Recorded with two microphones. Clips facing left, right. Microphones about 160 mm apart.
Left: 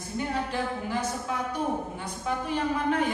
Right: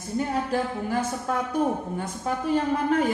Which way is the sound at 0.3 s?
45° right (ahead or behind).